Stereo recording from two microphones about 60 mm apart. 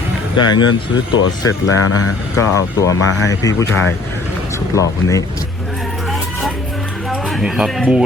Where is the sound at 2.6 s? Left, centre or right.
Left.